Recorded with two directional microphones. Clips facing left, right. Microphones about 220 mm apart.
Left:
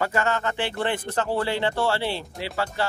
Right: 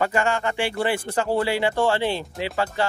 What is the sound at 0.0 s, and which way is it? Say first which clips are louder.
Speech: right 2 dB; 15° right (ahead or behind).